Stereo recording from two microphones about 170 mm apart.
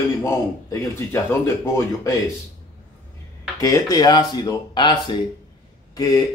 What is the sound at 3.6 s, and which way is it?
Speech, 20° left (ahead or behind).